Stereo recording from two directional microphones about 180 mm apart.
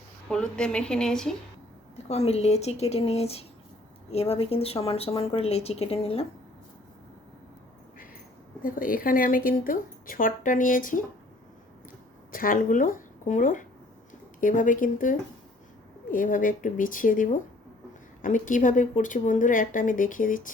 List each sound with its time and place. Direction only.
0.3 s speech: 5° left (ahead or behind)
2.0 s speech: 35° left (ahead or behind)
8.6 s a woman's voice: 50° left (ahead or behind)
12.3 s a woman's voice: 50° left (ahead or behind)